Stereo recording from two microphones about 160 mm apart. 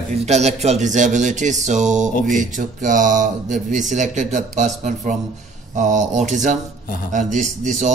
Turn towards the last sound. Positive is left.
turn(degrees=-50)  # may be behind; listen again after turning